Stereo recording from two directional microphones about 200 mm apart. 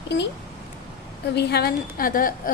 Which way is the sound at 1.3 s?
55° left (ahead or behind).